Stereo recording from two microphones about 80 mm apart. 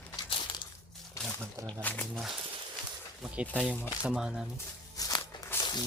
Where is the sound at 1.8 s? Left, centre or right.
Left.